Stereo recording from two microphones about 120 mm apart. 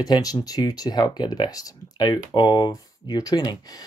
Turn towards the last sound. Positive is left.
turn(degrees=30)  # may be behind; listen again after turning